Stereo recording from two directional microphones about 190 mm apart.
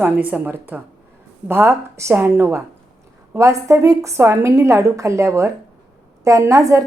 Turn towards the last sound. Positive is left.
turn(degrees=-15)  # may be behind; listen again after turning